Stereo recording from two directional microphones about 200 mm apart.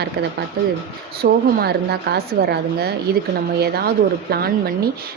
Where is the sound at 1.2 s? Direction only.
50° right (ahead or behind).